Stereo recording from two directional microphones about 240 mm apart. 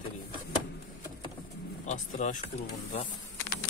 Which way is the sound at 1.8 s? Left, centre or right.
Left.